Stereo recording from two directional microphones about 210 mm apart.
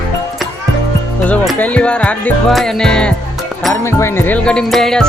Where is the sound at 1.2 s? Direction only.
5° left (ahead or behind).